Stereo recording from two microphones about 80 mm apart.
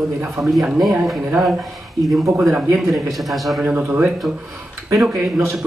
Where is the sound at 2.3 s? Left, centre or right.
Right.